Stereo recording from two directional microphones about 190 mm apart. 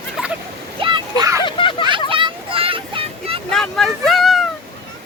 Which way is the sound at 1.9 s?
25° right (ahead or behind).